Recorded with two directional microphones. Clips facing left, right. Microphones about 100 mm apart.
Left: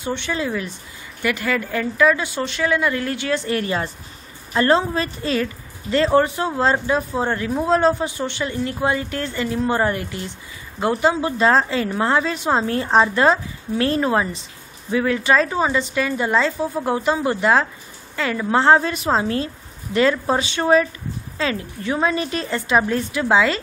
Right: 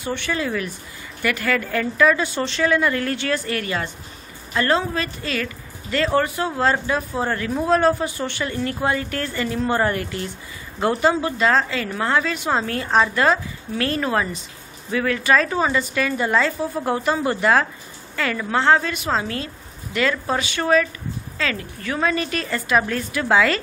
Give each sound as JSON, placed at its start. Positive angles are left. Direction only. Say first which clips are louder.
{"t": 0.0, "sound": "a woman's voice", "louder": "left 1 dB", "side_deg": 20}
{"t": 3.3, "sound": "a woman's voice", "louder": "left 3 dB", "side_deg": 25}
{"t": 18.6, "sound": "a woman's voice", "louder": "left 2 dB", "side_deg": 30}